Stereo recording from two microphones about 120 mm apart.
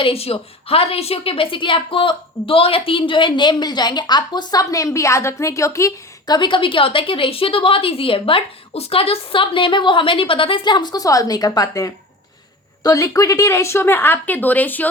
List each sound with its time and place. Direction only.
0.0 s a woman's voice: 55° left (ahead or behind); by 14.8 s 15° left (ahead or behind)